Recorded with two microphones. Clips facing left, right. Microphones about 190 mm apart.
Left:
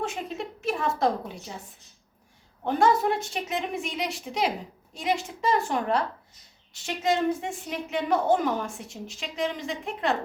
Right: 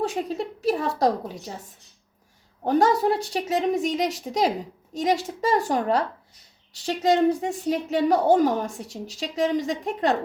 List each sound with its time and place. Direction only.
0.0 s a woman's voice: 35° right (ahead or behind)
2.6 s a woman's voice: 35° right (ahead or behind)